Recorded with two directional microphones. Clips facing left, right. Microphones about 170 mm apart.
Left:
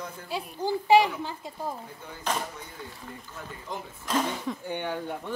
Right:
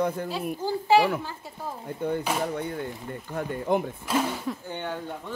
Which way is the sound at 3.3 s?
60° right (ahead or behind).